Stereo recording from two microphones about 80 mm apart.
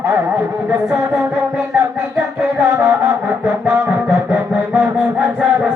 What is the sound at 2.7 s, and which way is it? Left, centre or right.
Music, right.